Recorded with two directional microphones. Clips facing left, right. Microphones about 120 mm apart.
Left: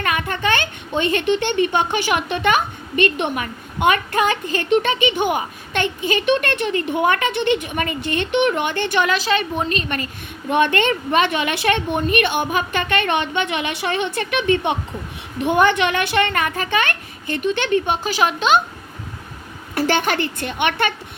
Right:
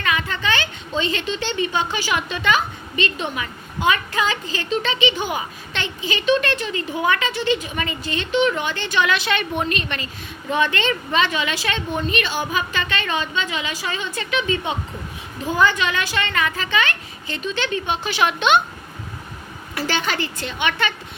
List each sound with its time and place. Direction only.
0.0 s a woman's voice: 50° left (ahead or behind)
10.5 s a woman's voice: 55° left (ahead or behind); by 18.6 s 40° left (ahead or behind)
19.7 s a woman's voice: 55° left (ahead or behind)